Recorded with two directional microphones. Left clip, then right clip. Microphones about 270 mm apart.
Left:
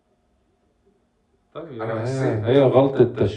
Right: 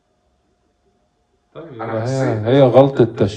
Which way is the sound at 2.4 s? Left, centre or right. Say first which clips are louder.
Right 5 dB; right.